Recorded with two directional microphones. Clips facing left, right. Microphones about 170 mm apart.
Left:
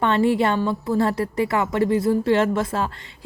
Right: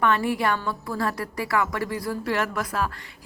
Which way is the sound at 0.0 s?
25° left (ahead or behind).